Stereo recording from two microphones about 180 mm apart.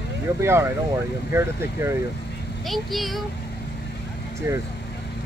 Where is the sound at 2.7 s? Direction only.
Centre (ahead or behind).